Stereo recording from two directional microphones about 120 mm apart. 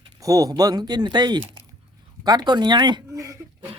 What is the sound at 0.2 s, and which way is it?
Speech, 30° right (ahead or behind).